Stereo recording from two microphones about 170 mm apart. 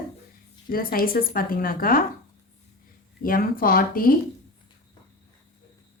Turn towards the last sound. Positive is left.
turn(degrees=60)  # may be behind; listen again after turning